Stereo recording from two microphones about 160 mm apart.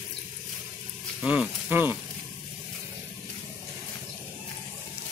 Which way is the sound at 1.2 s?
5° right (ahead or behind).